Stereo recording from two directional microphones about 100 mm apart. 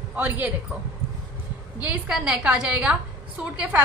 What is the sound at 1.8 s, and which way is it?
A woman's voice, 15° right (ahead or behind).